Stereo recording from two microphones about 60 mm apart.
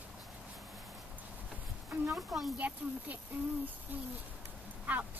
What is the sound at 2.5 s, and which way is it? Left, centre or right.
Speech, right.